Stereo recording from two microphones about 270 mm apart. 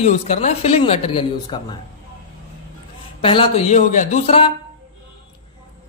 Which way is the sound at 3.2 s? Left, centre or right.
Centre.